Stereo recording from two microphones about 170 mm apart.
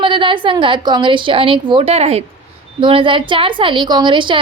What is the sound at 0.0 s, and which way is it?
A woman's voice, 30° right (ahead or behind).